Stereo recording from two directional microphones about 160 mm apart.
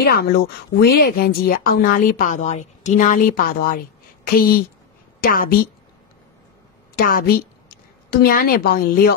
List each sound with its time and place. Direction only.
0.0 s speech: 75° left (ahead or behind)
7.0 s a woman's voice: 65° left (ahead or behind)